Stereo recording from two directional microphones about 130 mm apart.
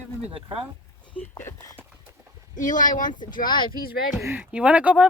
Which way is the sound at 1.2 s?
15° left (ahead or behind).